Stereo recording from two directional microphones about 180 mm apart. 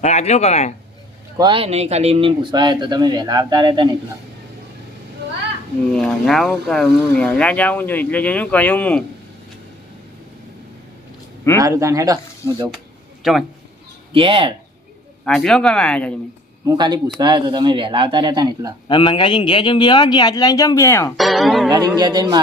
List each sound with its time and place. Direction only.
0.0 s speech: 40° left (ahead or behind)
1.4 s speech: 30° right (ahead or behind)
5.9 s speech: 5° left (ahead or behind)
11.6 s speech: 15° right (ahead or behind)
13.2 s a man's voice: centre (ahead or behind)
14.1 s speech: 30° right (ahead or behind)
15.2 s a man's voice: centre (ahead or behind)
16.6 s speech: 25° right (ahead or behind)
18.9 s a man's voice: 25° left (ahead or behind)
21.2 s a man's voice: centre (ahead or behind)
21.7 s speech: 25° right (ahead or behind)